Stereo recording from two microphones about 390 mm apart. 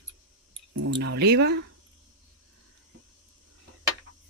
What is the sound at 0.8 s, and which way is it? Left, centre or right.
Speech, right.